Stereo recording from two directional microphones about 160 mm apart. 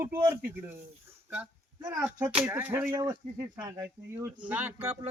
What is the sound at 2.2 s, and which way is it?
Speech, 10° right (ahead or behind).